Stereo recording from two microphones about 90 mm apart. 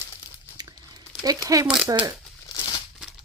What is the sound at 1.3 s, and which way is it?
Speech, 40° right (ahead or behind).